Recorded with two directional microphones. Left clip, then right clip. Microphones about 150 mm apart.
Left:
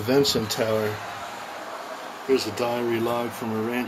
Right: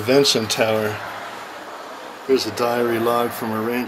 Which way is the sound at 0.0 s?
15° left (ahead or behind).